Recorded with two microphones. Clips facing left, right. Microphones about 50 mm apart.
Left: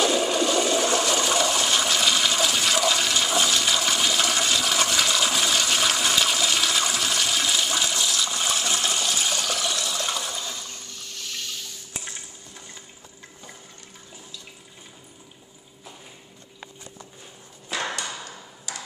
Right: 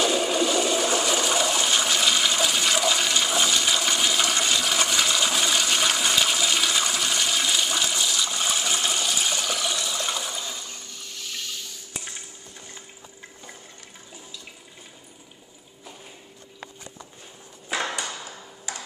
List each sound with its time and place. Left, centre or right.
0.0 s toilet flush: centre
18.7 s ping: right